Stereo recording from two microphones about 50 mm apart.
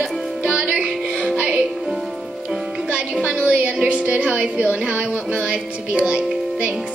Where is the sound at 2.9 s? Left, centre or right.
Right.